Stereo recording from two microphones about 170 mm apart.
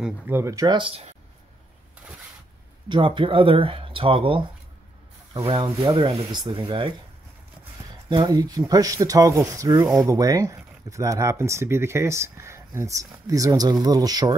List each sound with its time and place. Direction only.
0.0 s speech: 15° right (ahead or behind); by 1.0 s 30° right (ahead or behind)
2.9 s speech: 30° right (ahead or behind)
8.1 s speech: 25° right (ahead or behind)